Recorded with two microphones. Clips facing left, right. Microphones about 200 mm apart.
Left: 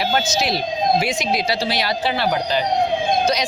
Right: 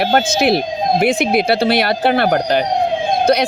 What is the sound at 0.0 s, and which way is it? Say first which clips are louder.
A man's voice: right 6 dB; 55° right (ahead or behind).